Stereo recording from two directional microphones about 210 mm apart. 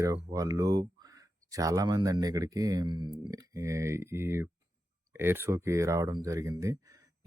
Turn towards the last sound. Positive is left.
turn(degrees=-15)  # may be behind; listen again after turning